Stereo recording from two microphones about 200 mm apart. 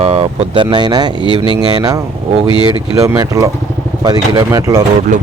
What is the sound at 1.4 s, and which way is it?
Speech, 25° left (ahead or behind).